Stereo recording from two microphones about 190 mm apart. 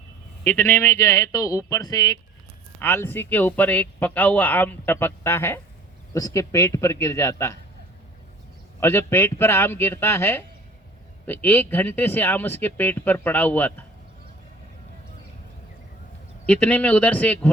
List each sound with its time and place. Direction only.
0.4 s speech: 10° left (ahead or behind)
8.8 s speech: 10° left (ahead or behind)
16.5 s speech: 5° left (ahead or behind)